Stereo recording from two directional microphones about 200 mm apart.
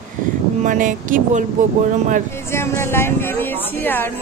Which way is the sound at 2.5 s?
15° left (ahead or behind).